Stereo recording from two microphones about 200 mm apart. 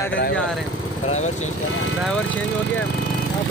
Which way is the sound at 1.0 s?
35° left (ahead or behind).